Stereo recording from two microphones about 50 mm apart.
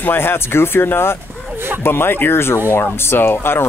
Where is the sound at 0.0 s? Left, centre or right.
Left.